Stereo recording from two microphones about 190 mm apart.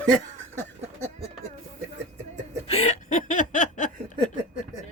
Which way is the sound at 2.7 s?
35° left (ahead or behind).